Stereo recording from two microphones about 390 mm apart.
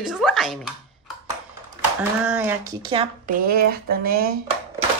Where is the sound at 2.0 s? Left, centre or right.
Centre.